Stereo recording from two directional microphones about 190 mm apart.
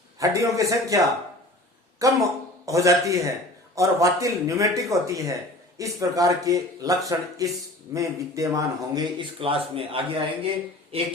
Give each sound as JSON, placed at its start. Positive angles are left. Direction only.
{"t": 0.2, "sound": "speech", "side_deg": -15}